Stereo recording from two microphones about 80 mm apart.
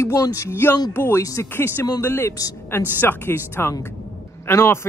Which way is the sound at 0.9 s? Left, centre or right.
Left.